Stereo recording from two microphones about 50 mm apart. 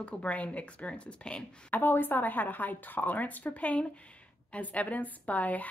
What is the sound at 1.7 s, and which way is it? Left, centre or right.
A woman's voice, left.